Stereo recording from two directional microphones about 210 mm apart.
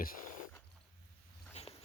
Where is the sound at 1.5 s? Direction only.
30° left (ahead or behind).